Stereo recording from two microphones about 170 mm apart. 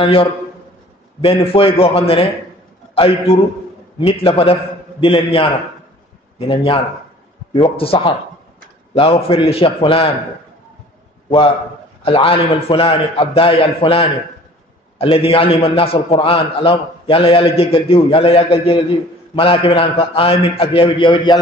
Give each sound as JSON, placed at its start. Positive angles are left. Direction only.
{"t": 0.0, "sound": "a man's voice", "side_deg": 35}
{"t": 11.2, "sound": "a man's voice", "side_deg": 35}